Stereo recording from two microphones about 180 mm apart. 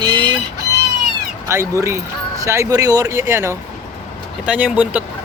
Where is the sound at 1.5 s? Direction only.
15° right (ahead or behind).